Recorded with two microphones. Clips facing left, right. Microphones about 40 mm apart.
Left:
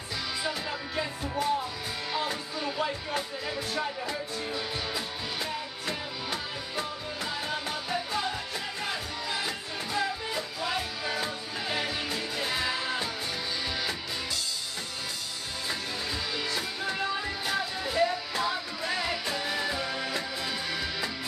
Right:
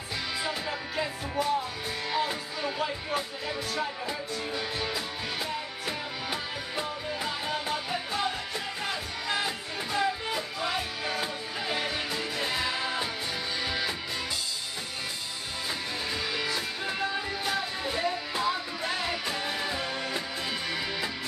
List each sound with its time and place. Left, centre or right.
0.4 s music: centre
3.2 s speech: centre
4.0 s music: centre
4.7 s music: centre
5.9 s music: centre
9.9 s music: centre
12.8 s music: centre
17.5 s music: centre
18.8 s music: right
19.4 s music: centre
20.0 s music: right